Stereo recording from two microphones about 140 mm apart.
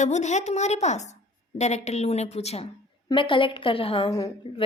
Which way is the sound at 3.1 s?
35° left (ahead or behind).